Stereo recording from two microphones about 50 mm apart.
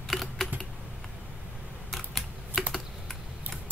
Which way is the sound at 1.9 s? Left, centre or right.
Centre.